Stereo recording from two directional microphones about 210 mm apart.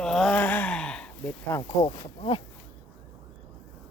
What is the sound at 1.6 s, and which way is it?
Speech, 25° left (ahead or behind).